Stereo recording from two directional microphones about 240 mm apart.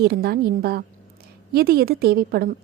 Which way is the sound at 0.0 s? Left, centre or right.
Right.